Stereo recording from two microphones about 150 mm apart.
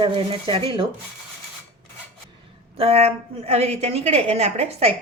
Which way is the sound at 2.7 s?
40° right (ahead or behind).